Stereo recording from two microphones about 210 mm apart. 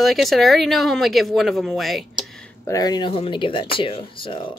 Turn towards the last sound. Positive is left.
turn(degrees=25)  # may be behind; listen again after turning